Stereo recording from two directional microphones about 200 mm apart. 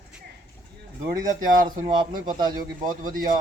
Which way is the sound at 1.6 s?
25° right (ahead or behind).